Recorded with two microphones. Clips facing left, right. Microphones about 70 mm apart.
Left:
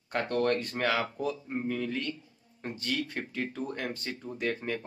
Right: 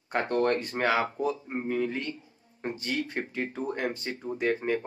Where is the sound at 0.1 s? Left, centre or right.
Centre.